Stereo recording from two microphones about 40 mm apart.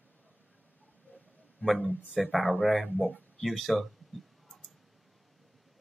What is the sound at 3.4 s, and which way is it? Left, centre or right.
Speech, centre.